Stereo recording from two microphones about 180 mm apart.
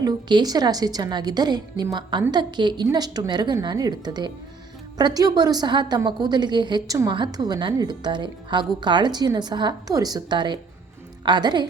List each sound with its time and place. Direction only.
0.0 s a woman's voice: 20° right (ahead or behind)